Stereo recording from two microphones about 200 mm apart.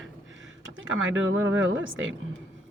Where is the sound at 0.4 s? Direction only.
75° right (ahead or behind).